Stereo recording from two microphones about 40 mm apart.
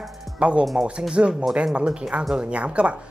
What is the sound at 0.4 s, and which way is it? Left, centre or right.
Speech, right.